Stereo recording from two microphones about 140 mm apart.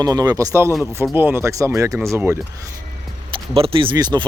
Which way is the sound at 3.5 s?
40° right (ahead or behind).